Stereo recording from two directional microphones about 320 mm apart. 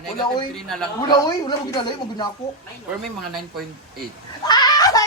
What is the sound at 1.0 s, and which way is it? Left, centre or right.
Speech, centre.